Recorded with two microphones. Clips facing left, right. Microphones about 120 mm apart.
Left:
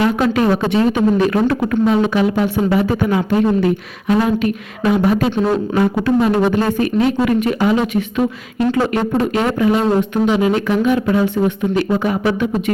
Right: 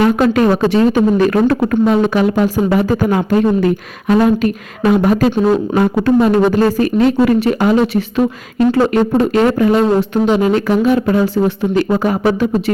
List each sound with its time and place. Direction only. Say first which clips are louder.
0.0 s speech: right 3 dB; 45° right (ahead or behind)